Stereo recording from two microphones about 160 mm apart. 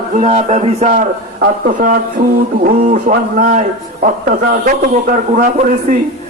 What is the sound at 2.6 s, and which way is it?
A man's voice, 55° right (ahead or behind).